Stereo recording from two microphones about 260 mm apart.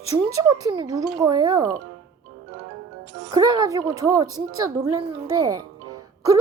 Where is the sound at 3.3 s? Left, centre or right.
Centre.